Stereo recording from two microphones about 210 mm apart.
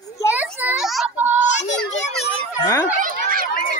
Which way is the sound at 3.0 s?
40° right (ahead or behind).